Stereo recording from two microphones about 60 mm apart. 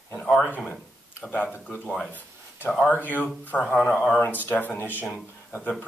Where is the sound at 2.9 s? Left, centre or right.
Left.